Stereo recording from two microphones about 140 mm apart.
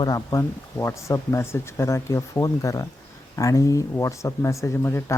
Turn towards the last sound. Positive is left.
turn(degrees=20)  # may be behind; listen again after turning